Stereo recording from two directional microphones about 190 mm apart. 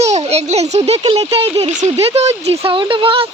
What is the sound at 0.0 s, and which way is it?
A child's voice, 35° right (ahead or behind).